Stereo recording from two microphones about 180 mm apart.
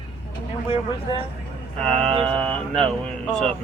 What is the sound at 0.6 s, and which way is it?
Speech, 30° left (ahead or behind).